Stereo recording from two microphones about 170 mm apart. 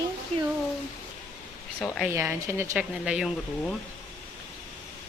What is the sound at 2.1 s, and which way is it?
Speech, 15° right (ahead or behind).